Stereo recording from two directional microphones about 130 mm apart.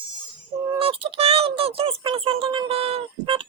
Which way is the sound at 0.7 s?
45° right (ahead or behind).